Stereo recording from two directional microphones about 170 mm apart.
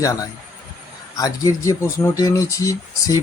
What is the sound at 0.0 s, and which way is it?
Speech, 20° left (ahead or behind).